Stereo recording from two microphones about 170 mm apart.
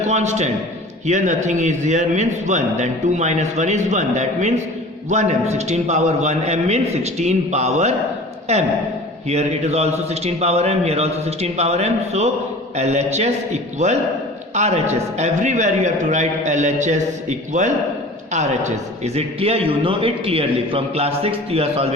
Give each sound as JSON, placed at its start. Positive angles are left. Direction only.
{"t": 0.0, "sound": "a man's voice", "side_deg": -45}